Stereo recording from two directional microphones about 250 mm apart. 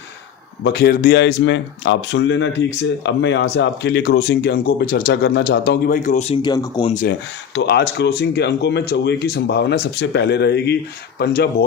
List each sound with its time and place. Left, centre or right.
0.6 s speech: left; by 6.9 s centre
6.9 s speech: left